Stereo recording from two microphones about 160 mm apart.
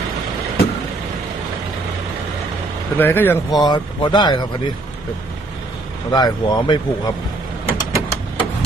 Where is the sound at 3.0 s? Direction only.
15° left (ahead or behind).